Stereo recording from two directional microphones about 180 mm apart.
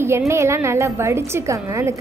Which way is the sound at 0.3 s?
15° right (ahead or behind).